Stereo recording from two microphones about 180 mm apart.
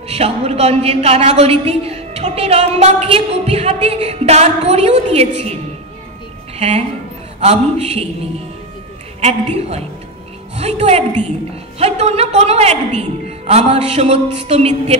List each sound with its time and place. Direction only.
0.1 s a woman's voice: 35° right (ahead or behind)
7.3 s a woman's voice: 35° right (ahead or behind)
9.2 s a woman's voice: 35° right (ahead or behind)